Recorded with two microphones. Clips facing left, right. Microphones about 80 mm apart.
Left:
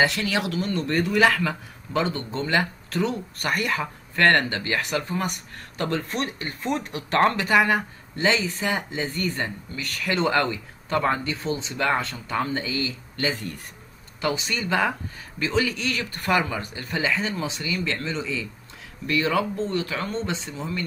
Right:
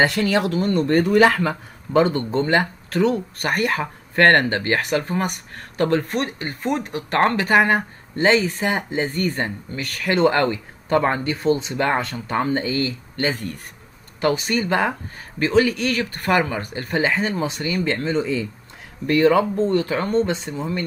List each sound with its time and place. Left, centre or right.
0.0 s speech: right